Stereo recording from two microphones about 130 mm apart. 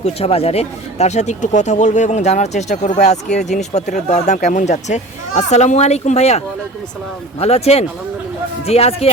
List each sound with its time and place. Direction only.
0.0 s speech: 50° left (ahead or behind)